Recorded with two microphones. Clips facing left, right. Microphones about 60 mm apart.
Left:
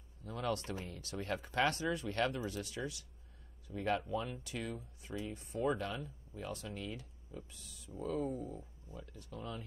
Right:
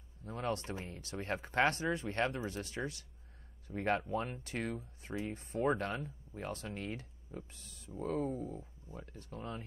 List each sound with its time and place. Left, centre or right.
0.2 s speech: right